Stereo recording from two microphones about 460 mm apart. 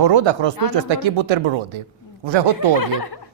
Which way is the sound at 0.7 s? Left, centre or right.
Right.